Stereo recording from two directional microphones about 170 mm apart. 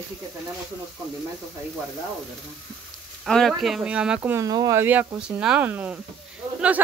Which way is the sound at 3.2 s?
5° left (ahead or behind).